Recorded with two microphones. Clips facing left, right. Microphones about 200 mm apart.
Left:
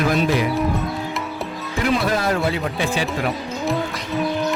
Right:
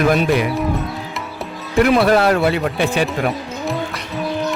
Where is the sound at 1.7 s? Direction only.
65° right (ahead or behind).